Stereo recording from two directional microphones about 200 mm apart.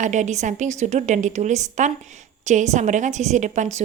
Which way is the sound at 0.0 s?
35° right (ahead or behind).